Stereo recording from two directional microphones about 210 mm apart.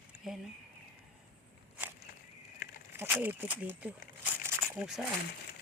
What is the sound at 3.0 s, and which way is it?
Speech, 10° right (ahead or behind).